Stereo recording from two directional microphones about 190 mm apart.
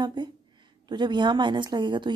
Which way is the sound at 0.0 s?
20° right (ahead or behind).